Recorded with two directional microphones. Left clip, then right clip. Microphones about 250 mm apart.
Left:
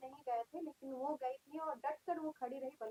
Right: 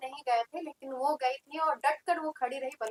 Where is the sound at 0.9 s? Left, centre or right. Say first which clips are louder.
Right 12 dB; right.